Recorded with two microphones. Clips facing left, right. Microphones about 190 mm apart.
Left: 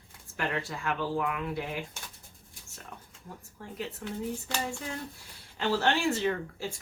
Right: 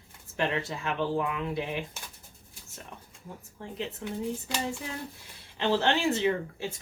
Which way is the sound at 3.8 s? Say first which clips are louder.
Right 2 dB; 15° right (ahead or behind).